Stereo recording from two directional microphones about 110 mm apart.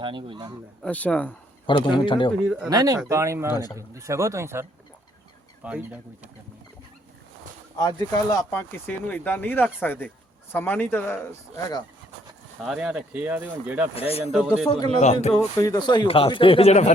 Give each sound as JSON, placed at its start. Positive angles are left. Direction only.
{"t": 0.0, "sound": "a man's voice", "side_deg": -50}
{"t": 0.9, "sound": "speech", "side_deg": 15}
{"t": 1.6, "sound": "speech", "side_deg": 45}
{"t": 2.6, "sound": "speech", "side_deg": -35}
{"t": 3.5, "sound": "speech", "side_deg": 35}
{"t": 3.8, "sound": "speech", "side_deg": -30}
{"t": 5.6, "sound": "speech", "side_deg": -10}
{"t": 7.8, "sound": "speech", "side_deg": 40}
{"t": 12.5, "sound": "speech", "side_deg": -5}
{"t": 13.9, "sound": "speech", "side_deg": 65}
{"t": 14.3, "sound": "a man's voice", "side_deg": -5}
{"t": 14.9, "sound": "speech", "side_deg": 90}
{"t": 15.5, "sound": "speech", "side_deg": 30}
{"t": 16.0, "sound": "speech", "side_deg": 55}